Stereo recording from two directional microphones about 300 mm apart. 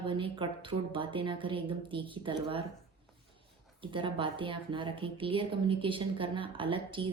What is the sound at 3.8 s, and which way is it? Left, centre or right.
A woman's voice, centre.